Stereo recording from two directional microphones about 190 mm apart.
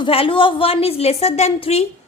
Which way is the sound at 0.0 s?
30° left (ahead or behind).